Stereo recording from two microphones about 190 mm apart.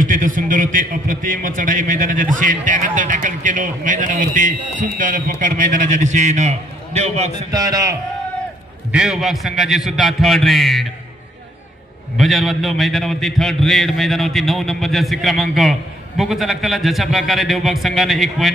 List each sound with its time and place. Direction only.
0.0 s a man's voice: 45° right (ahead or behind)
7.5 s a man's voice: 20° right (ahead or behind)
8.9 s a man's voice: 5° right (ahead or behind)
12.2 s a man's voice: centre (ahead or behind)